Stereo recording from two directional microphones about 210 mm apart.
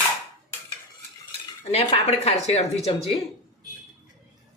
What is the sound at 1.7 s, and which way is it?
Speech, 30° left (ahead or behind).